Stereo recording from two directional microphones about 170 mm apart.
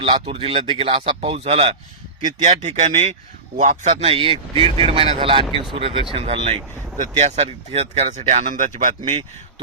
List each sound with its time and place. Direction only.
0.0 s speech: 35° right (ahead or behind)
2.2 s speech: 50° right (ahead or behind)